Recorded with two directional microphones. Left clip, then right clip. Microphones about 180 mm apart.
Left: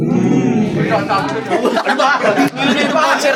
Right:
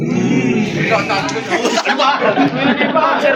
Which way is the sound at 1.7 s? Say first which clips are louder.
Right 1 dB; 40° left (ahead or behind).